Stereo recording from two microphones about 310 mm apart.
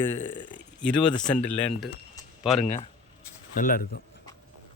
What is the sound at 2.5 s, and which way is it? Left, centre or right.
Speech, left.